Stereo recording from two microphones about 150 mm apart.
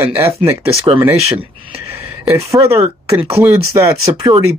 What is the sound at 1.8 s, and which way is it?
Speech, 20° right (ahead or behind).